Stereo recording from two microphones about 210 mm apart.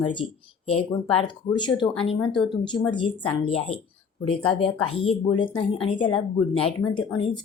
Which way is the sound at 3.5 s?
30° left (ahead or behind).